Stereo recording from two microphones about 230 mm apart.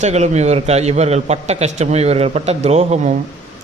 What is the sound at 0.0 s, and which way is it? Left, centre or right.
Speech, right.